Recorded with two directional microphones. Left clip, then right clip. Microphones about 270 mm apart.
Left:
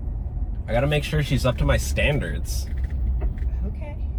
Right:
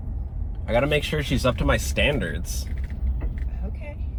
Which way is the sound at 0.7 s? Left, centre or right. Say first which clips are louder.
Right 1 dB; centre.